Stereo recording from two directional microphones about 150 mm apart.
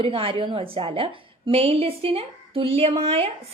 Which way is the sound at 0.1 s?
40° right (ahead or behind).